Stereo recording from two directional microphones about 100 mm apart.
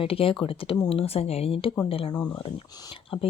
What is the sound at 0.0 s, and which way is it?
Speech, 65° left (ahead or behind).